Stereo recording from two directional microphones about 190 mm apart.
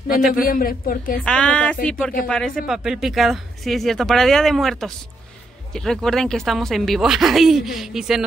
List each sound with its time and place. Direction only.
0.3 s speech: 50° left (ahead or behind)
1.2 s speech: 5° left (ahead or behind)